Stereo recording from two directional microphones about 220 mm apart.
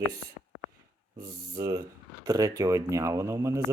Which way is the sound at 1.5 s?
15° right (ahead or behind).